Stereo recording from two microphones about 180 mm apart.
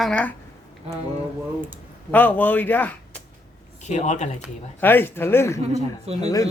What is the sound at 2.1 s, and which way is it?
Speech, 10° left (ahead or behind).